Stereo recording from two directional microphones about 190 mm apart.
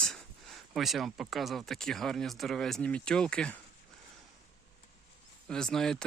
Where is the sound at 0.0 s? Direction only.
Centre (ahead or behind).